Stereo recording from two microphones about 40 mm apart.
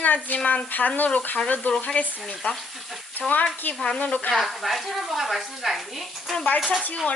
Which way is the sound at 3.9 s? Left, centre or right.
Left.